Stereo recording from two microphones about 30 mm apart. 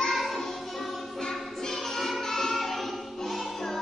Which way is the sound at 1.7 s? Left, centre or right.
Centre.